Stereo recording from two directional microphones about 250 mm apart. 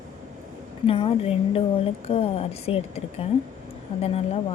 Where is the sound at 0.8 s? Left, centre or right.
Left.